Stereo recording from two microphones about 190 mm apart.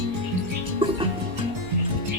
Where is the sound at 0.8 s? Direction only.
30° right (ahead or behind).